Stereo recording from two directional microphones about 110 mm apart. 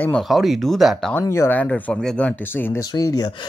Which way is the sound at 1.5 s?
10° left (ahead or behind).